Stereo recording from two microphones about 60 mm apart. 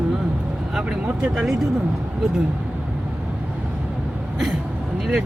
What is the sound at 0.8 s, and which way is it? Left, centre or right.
Speech, right.